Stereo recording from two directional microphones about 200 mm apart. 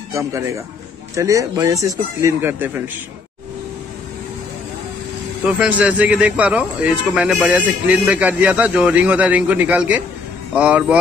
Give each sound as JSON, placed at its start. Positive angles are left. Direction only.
{"t": 0.1, "sound": "speech", "side_deg": -15}
{"t": 5.4, "sound": "speech", "side_deg": -5}